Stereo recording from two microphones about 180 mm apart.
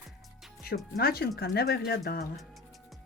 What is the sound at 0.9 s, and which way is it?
Speech, 60° left (ahead or behind).